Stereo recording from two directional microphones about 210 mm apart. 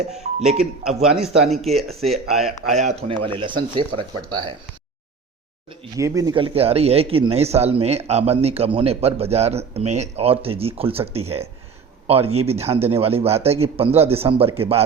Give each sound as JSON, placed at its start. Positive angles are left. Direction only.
{"t": 0.4, "sound": "speech", "side_deg": -5}
{"t": 1.9, "sound": "speech", "side_deg": -30}
{"t": 2.3, "sound": "speech", "side_deg": 0}
{"t": 2.7, "sound": "speech", "side_deg": -35}
{"t": 6.0, "sound": "speech", "side_deg": -15}